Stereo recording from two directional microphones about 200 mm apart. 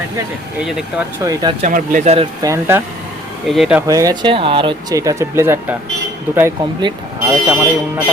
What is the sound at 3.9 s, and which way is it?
Speech, 15° right (ahead or behind).